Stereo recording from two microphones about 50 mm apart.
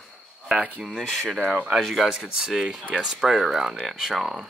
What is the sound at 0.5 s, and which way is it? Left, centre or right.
Speech, right.